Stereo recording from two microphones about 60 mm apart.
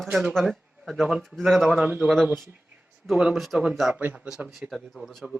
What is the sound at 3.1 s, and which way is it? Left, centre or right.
Speech, centre.